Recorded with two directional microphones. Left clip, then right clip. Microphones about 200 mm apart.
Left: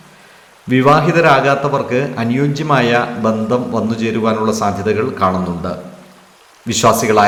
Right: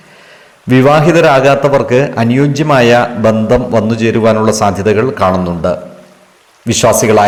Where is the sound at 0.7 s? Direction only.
30° right (ahead or behind).